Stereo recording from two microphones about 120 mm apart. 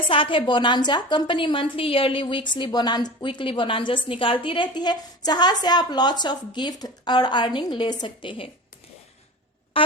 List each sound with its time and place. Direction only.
0.1 s a woman's voice: 45° left (ahead or behind)
9.7 s music: 50° left (ahead or behind)